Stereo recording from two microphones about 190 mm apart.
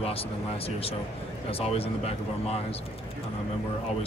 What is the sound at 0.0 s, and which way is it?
Speech, 30° left (ahead or behind).